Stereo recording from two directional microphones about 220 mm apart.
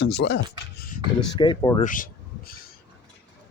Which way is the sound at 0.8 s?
40° left (ahead or behind).